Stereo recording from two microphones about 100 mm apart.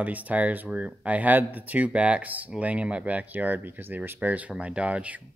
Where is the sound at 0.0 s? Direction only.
15° right (ahead or behind).